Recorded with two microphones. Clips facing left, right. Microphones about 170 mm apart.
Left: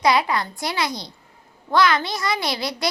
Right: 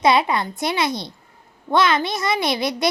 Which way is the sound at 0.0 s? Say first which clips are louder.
Right 2 dB; 25° right (ahead or behind).